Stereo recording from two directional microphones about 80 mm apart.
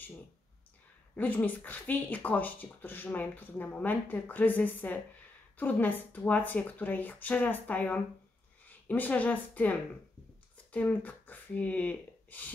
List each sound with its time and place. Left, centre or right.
1.1 s speech: left